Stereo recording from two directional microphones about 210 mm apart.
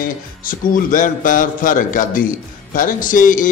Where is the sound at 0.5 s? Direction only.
40° left (ahead or behind).